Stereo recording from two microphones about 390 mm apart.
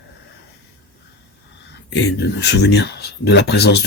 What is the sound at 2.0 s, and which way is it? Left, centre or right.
Speech, left.